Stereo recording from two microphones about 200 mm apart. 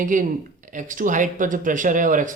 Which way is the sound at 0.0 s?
40° right (ahead or behind).